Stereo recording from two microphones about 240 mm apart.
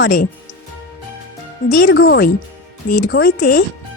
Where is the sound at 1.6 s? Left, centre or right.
Left.